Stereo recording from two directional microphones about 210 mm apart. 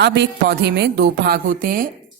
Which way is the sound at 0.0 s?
55° right (ahead or behind).